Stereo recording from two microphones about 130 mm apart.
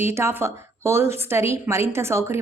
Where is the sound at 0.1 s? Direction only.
20° right (ahead or behind).